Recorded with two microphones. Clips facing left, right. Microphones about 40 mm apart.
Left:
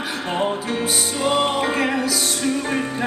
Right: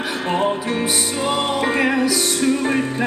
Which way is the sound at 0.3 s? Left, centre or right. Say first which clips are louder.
Right 2 dB; centre.